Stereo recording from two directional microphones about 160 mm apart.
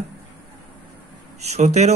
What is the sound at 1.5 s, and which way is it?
Speech, 45° right (ahead or behind).